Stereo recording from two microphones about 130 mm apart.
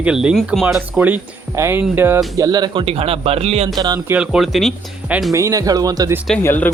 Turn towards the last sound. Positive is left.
turn(degrees=15)  # may be behind; listen again after turning